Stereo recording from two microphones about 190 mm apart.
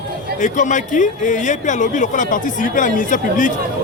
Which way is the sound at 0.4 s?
40° left (ahead or behind).